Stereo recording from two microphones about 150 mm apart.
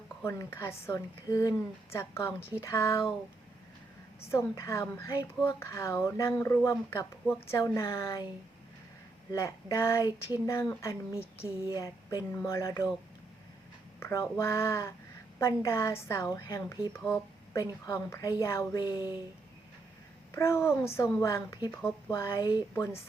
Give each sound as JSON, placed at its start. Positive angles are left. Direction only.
{"t": 0.2, "sound": "a woman's voice", "side_deg": 15}
{"t": 4.3, "sound": "a woman's voice", "side_deg": 20}
{"t": 9.3, "sound": "a woman's voice", "side_deg": 20}
{"t": 14.0, "sound": "a woman's voice", "side_deg": 20}
{"t": 20.3, "sound": "a woman's voice", "side_deg": 20}